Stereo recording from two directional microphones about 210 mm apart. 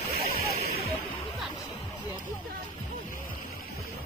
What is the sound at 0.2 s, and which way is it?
Music, 45° left (ahead or behind).